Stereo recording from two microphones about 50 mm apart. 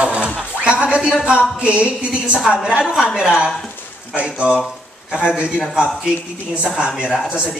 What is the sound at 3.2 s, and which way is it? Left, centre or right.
Speech, centre.